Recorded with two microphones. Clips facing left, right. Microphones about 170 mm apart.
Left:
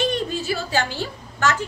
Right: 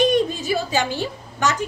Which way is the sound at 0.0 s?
15° right (ahead or behind).